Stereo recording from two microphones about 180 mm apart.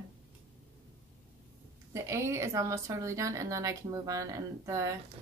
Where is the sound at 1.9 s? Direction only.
15° right (ahead or behind).